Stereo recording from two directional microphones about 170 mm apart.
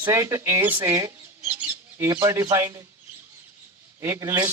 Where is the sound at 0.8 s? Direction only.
20° right (ahead or behind).